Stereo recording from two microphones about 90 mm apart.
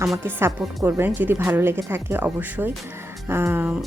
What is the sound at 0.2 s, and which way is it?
Speech, 25° right (ahead or behind).